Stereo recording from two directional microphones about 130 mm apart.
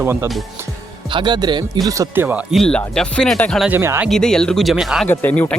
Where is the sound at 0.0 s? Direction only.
20° right (ahead or behind).